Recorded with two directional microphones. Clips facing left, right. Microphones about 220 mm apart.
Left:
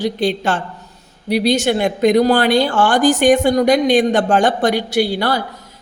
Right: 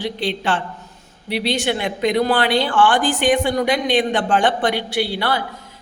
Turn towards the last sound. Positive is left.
turn(degrees=45)  # may be behind; listen again after turning